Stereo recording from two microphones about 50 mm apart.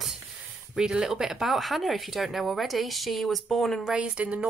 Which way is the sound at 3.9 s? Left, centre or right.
Right.